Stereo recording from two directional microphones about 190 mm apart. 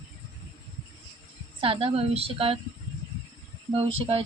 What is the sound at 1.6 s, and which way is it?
A woman's voice, 30° right (ahead or behind).